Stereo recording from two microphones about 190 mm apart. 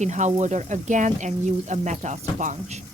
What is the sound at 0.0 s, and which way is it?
Speech, 40° right (ahead or behind).